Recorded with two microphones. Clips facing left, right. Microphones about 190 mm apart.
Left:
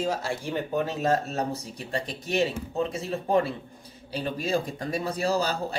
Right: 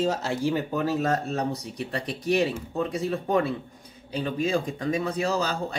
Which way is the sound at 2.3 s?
25° left (ahead or behind).